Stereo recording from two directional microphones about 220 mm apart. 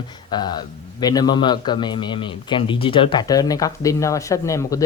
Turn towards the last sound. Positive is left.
turn(degrees=15)  # may be behind; listen again after turning